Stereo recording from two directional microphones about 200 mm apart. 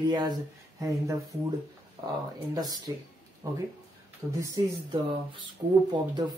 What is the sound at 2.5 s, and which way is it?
Speech, 20° right (ahead or behind).